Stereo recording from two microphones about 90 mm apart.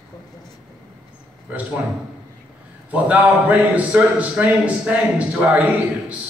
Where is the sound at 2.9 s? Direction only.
15° right (ahead or behind).